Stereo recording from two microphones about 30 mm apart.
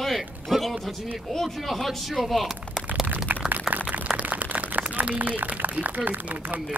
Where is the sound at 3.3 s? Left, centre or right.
Right.